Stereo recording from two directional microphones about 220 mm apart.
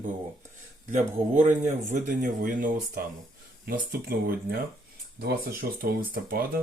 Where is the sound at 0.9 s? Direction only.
35° right (ahead or behind).